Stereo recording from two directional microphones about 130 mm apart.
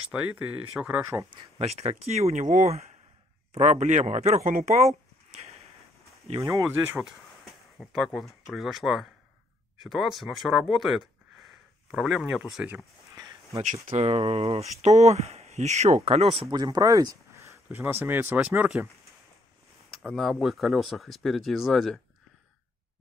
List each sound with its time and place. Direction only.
0.1 s speech: 10° right (ahead or behind)
1.6 s speech: 55° right (ahead or behind)
6.4 s speech: 25° right (ahead or behind)
7.8 s speech: centre (ahead or behind)
13.1 s a sound: 25° right (ahead or behind)
14.0 s speech: 45° right (ahead or behind)
16.4 s speech: 30° right (ahead or behind); by 18.9 s 15° right (ahead or behind)
20.0 s speech: centre (ahead or behind)